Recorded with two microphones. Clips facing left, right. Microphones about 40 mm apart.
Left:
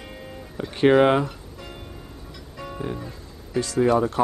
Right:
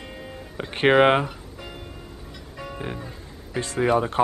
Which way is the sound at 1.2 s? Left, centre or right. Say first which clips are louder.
Right 1 dB; centre.